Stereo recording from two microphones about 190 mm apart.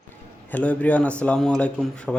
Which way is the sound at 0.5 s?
5° left (ahead or behind).